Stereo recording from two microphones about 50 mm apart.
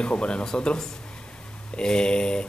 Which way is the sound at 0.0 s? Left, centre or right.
Centre.